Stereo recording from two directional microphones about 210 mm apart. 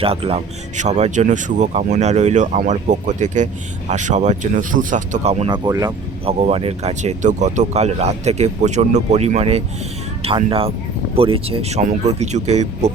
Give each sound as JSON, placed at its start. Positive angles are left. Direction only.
{"t": 0.0, "sound": "speech", "side_deg": -25}
{"t": 5.6, "sound": "speech", "side_deg": -20}
{"t": 6.4, "sound": "speech", "side_deg": -30}